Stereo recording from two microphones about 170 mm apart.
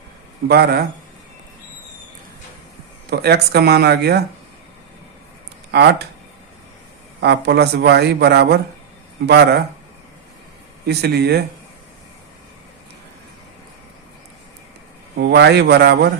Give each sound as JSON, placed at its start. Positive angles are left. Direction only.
{"t": 0.4, "sound": "a man's voice", "side_deg": -70}
{"t": 3.1, "sound": "a man's voice", "side_deg": -70}
{"t": 5.7, "sound": "a man's voice", "side_deg": -75}
{"t": 7.2, "sound": "a man's voice", "side_deg": -75}
{"t": 10.8, "sound": "a man's voice", "side_deg": -75}
{"t": 15.2, "sound": "a man's voice", "side_deg": -75}